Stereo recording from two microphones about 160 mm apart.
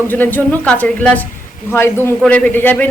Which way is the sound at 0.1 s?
10° left (ahead or behind).